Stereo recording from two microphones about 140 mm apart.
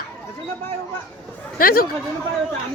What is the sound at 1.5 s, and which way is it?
Speech, 90° left.